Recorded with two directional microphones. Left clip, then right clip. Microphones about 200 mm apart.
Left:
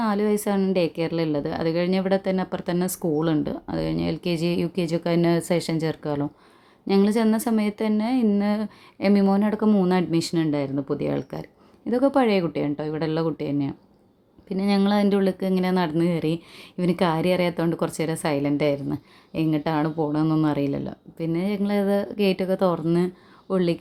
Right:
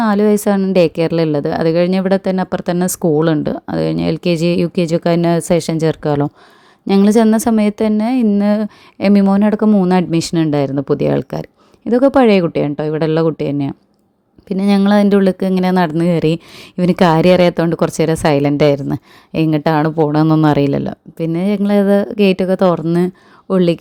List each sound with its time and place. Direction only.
0.0 s speech: 35° right (ahead or behind)